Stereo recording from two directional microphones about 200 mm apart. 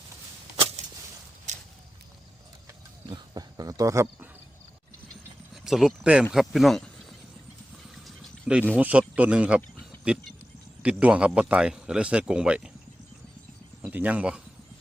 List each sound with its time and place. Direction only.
0.5 s a sound: 30° right (ahead or behind)
3.1 s speech: 20° right (ahead or behind)
5.6 s a man's voice: centre (ahead or behind)
7.9 s a sound: centre (ahead or behind)
8.8 s a man's voice: 5° right (ahead or behind)
13.8 s speech: 10° right (ahead or behind)